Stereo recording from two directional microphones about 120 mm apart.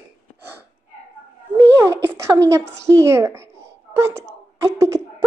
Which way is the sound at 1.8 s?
25° right (ahead or behind).